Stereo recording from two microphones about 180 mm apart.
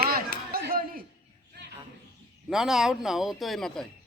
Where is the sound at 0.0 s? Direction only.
55° right (ahead or behind).